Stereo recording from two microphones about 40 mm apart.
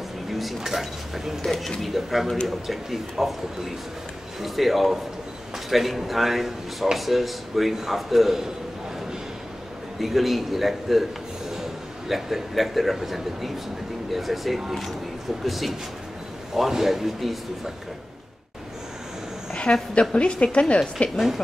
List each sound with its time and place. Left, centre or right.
0.3 s speech: centre
1.4 s speech: centre
9.9 s a man's voice: centre
19.9 s a woman's voice: left